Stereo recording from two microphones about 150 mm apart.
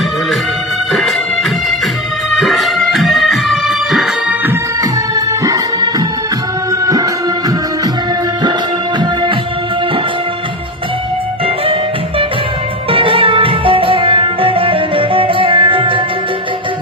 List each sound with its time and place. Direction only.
2.4 s music: centre (ahead or behind)
4.4 s music: 25° right (ahead or behind)
11.4 s music: 40° right (ahead or behind)
12.9 s music: 35° right (ahead or behind)